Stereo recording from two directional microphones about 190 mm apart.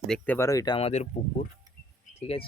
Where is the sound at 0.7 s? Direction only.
35° left (ahead or behind).